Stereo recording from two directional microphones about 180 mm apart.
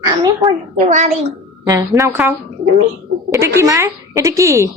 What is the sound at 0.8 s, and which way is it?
Speech, 40° right (ahead or behind).